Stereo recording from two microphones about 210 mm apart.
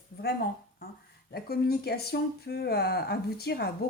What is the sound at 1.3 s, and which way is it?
Speech, 50° left (ahead or behind).